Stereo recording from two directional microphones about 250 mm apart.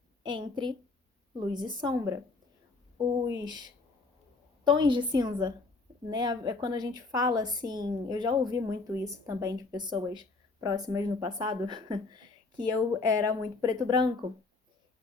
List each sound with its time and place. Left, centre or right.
0.2 s a woman's voice: centre
4.6 s a woman's voice: centre